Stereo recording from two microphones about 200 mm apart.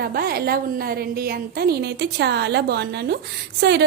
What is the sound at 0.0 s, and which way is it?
A woman's voice, 50° right (ahead or behind).